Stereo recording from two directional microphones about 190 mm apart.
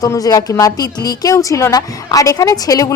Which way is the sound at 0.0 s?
20° left (ahead or behind).